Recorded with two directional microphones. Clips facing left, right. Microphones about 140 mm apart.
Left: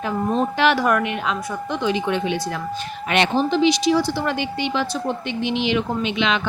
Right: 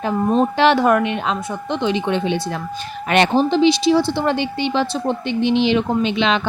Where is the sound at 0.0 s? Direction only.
30° right (ahead or behind).